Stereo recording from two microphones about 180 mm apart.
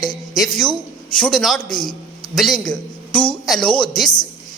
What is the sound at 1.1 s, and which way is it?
A man's voice, 5° left (ahead or behind).